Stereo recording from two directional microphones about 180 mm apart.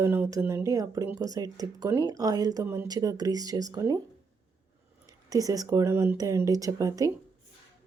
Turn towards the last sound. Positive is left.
turn(degrees=-20)  # may be behind; listen again after turning